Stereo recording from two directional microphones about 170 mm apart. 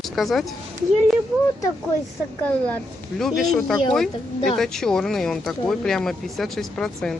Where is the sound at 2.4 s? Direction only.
10° left (ahead or behind).